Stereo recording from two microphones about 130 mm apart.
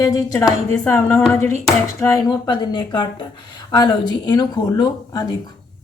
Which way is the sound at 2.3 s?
35° left (ahead or behind).